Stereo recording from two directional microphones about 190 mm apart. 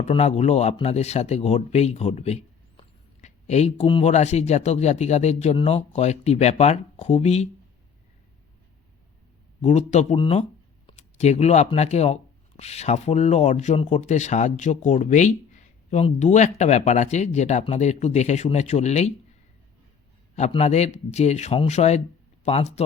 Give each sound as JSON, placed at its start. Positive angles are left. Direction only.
{"t": 0.0, "sound": "speech", "side_deg": 35}
{"t": 9.6, "sound": "speech", "side_deg": 35}
{"t": 20.5, "sound": "speech", "side_deg": 35}